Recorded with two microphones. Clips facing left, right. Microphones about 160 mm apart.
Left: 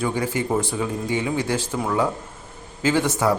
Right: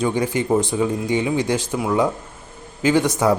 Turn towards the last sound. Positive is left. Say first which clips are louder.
# right 3 dB
turn(degrees=-15)  # may be behind; listen again after turning